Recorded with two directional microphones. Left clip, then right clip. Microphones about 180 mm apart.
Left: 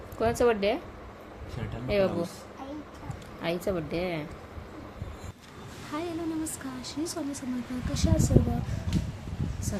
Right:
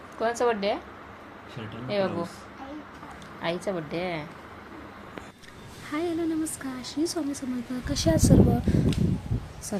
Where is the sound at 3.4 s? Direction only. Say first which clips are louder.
Right 1 dB; 40° left (ahead or behind).